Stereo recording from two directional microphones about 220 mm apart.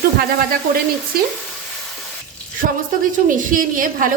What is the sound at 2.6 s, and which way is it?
A woman's voice, 35° right (ahead or behind).